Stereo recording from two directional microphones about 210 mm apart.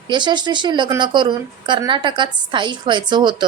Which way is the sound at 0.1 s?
20° right (ahead or behind).